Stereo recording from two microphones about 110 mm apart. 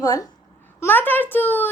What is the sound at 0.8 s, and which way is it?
Speech, 15° left (ahead or behind).